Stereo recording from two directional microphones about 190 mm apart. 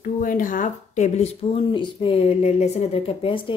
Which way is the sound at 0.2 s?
45° left (ahead or behind).